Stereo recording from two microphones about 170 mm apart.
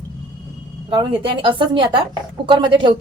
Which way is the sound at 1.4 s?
30° right (ahead or behind).